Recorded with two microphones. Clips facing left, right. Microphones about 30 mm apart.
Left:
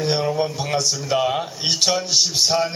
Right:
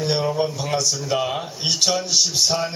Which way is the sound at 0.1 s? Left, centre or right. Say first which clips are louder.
Right 1 dB; centre.